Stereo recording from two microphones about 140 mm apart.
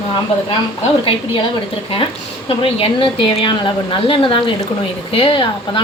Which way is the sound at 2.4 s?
40° left (ahead or behind).